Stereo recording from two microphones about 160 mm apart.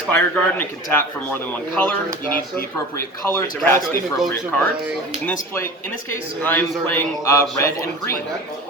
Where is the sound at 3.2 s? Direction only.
15° left (ahead or behind).